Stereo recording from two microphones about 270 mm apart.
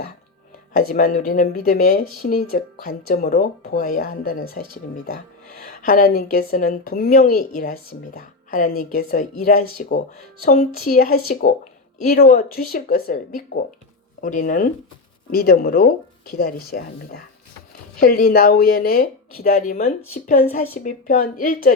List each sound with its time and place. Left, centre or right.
0.7 s speech: left